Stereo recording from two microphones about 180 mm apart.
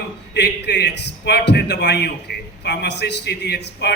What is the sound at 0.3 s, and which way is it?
A man's voice, 70° left (ahead or behind).